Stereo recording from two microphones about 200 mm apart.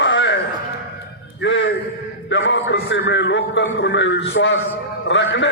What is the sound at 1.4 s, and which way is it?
A man's voice, 65° left (ahead or behind).